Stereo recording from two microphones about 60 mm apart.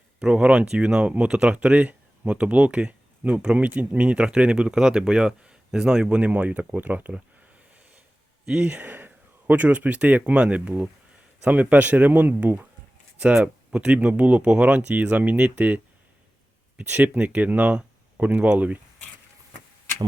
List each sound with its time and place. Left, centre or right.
0.2 s speech: centre
8.6 s speech: right
13.1 s speech: centre